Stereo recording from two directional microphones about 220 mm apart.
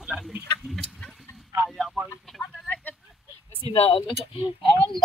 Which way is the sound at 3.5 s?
25° left (ahead or behind).